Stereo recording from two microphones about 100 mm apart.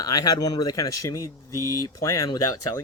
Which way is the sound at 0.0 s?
40° left (ahead or behind).